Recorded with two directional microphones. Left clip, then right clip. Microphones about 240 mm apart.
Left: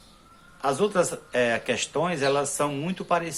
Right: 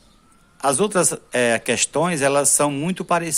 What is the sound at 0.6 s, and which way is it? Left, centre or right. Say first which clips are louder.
A man's voice: right 4 dB; right.